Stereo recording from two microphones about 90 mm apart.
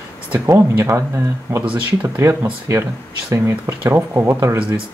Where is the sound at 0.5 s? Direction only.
30° right (ahead or behind).